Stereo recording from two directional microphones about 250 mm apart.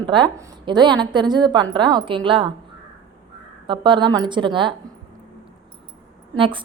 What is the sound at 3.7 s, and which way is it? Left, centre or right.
A woman's voice, centre.